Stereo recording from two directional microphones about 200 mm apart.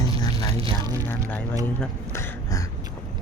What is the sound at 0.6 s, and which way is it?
Speech, 25° right (ahead or behind).